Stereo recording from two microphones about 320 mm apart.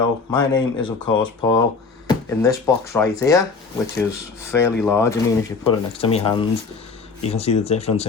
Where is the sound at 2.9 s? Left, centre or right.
Centre.